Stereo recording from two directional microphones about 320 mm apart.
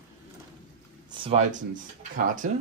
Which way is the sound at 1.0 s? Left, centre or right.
Centre.